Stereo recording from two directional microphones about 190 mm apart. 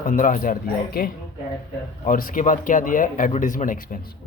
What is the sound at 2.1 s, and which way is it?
A man's voice, 45° left (ahead or behind).